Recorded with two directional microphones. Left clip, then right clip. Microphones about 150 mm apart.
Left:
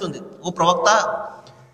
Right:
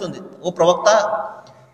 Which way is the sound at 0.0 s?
40° right (ahead or behind).